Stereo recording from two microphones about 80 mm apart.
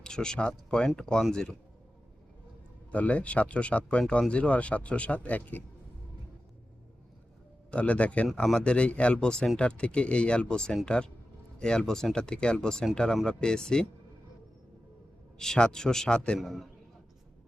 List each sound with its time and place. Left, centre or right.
0.0 s speech: centre
2.9 s speech: centre
7.7 s speech: centre
15.4 s speech: centre
16.4 s a man's voice: centre